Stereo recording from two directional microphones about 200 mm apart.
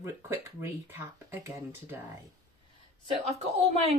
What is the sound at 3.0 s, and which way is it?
Speech, 30° right (ahead or behind).